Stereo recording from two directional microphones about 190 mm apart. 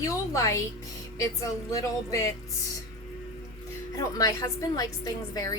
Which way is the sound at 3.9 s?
15° left (ahead or behind).